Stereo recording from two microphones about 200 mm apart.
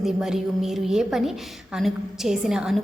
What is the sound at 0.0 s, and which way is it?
A woman's voice, centre (ahead or behind).